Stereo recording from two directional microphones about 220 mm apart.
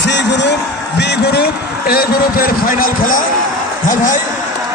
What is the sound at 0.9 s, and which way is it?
A man's voice, 50° left (ahead or behind).